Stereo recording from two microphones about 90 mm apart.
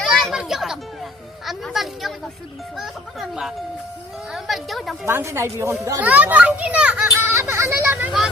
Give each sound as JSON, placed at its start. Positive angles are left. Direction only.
{"t": 0.0, "sound": "a sound", "side_deg": 0}
{"t": 0.3, "sound": "music", "side_deg": -5}
{"t": 1.5, "sound": "a woman's voice", "side_deg": 0}
{"t": 5.0, "sound": "a woman's voice", "side_deg": -30}
{"t": 6.0, "sound": "a child's voice", "side_deg": -15}
{"t": 7.2, "sound": "vehicle", "side_deg": -30}